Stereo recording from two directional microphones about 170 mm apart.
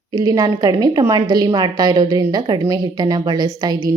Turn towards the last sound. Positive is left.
turn(degrees=-25)  # may be behind; listen again after turning